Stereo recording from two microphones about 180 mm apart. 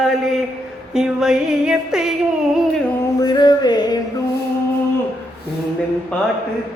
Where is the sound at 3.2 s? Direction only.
25° left (ahead or behind).